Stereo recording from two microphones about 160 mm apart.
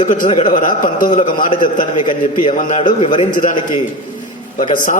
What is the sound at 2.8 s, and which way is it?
Speech, 40° left (ahead or behind).